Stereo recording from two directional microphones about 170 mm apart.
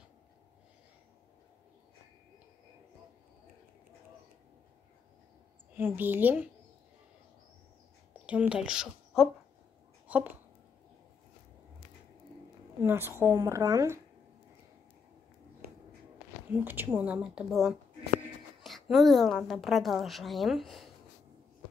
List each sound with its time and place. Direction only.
5.8 s a woman's voice: 10° right (ahead or behind)
8.1 s speech: 10° right (ahead or behind)
10.0 s a sound: 10° right (ahead or behind)
12.8 s a woman's voice: 15° right (ahead or behind)
16.5 s a woman's voice: 10° right (ahead or behind)
18.6 s a sound: centre (ahead or behind)
19.4 s speech: centre (ahead or behind)